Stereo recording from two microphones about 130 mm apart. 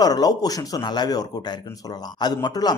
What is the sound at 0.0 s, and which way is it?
A man's voice, 30° left (ahead or behind).